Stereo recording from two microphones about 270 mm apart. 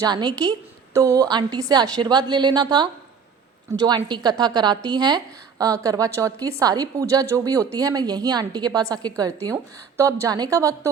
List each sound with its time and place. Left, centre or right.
0.0 s a woman's voice: centre